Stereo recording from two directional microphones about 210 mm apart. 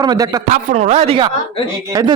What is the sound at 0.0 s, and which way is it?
Speech, 20° right (ahead or behind).